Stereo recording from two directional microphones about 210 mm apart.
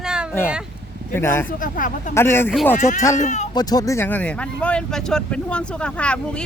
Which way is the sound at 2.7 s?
35° left (ahead or behind).